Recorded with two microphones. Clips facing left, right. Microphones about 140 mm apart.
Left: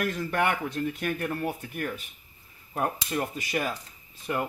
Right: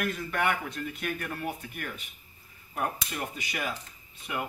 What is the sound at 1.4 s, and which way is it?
A man's voice, 40° left (ahead or behind).